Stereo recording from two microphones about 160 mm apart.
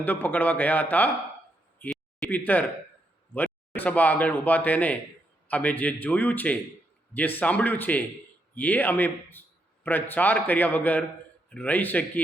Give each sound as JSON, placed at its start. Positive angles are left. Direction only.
{"t": 0.0, "sound": "speech", "side_deg": 10}
{"t": 1.8, "sound": "a sound", "side_deg": 5}
{"t": 3.3, "sound": "speech", "side_deg": 10}